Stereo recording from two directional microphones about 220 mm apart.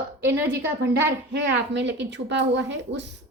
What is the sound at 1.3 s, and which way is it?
A woman's voice, 50° right (ahead or behind).